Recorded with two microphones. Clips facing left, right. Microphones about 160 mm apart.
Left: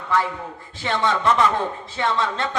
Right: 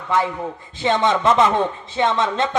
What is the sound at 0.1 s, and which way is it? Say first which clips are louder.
A man's voice: right 2 dB; 20° right (ahead or behind).